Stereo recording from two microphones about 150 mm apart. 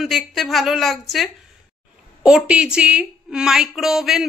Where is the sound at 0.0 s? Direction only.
Centre (ahead or behind).